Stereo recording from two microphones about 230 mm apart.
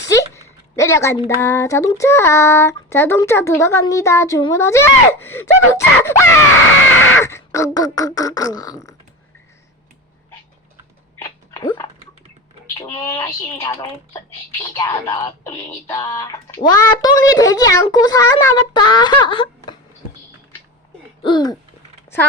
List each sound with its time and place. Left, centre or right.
0.8 s speech: centre
11.2 s a sound: centre
12.7 s speech: centre
21.2 s speech: centre